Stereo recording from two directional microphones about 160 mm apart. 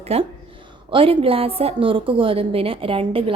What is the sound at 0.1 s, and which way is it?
A woman's voice, 40° right (ahead or behind).